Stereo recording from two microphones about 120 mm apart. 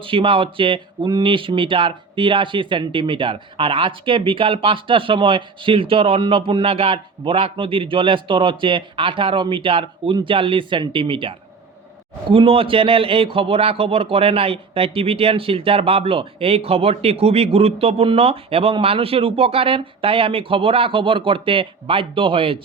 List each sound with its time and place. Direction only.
0.0 s a man's voice: 45° right (ahead or behind)